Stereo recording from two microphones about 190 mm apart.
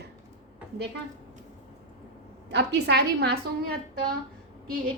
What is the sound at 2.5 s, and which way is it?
Speech, 65° right (ahead or behind).